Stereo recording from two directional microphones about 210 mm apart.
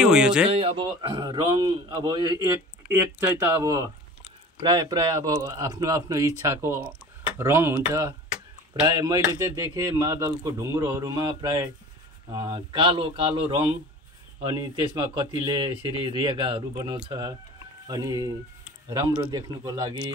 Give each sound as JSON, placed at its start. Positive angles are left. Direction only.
{"t": 0.0, "sound": "speech", "side_deg": -5}
{"t": 0.5, "sound": "a man's voice", "side_deg": -30}